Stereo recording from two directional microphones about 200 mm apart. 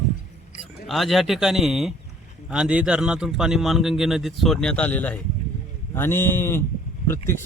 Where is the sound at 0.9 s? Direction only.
Centre (ahead or behind).